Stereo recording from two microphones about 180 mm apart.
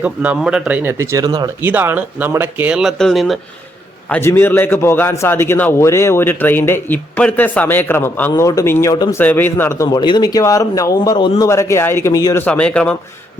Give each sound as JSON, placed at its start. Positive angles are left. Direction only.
{"t": 0.0, "sound": "speech", "side_deg": -10}
{"t": 1.6, "sound": "speech", "side_deg": -10}
{"t": 4.1, "sound": "a man's voice", "side_deg": 15}